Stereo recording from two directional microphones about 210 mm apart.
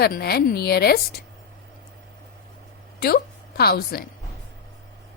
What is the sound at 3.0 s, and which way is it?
A woman's voice, 45° left (ahead or behind).